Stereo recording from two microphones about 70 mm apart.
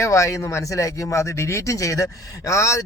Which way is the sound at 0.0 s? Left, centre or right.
Left.